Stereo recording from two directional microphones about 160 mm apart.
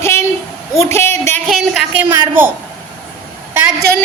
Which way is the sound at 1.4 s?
Centre (ahead or behind).